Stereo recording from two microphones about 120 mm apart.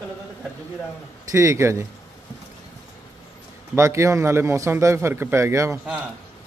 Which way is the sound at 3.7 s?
25° right (ahead or behind).